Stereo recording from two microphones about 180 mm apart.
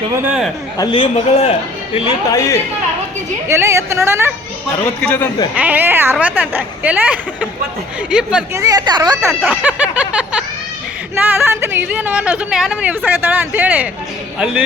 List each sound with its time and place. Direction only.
0.2 s speech: 5° right (ahead or behind)
0.8 s a man's voice: 25° left (ahead or behind)
2.3 s a man's voice: 15° left (ahead or behind)
3.5 s speech: 15° right (ahead or behind)
4.8 s a man's voice: 10° left (ahead or behind)
5.5 s speech: 10° right (ahead or behind)
8.5 s speech: 20° right (ahead or behind)
9.3 s a sound: 10° right (ahead or behind)
11.1 s speech: 10° right (ahead or behind)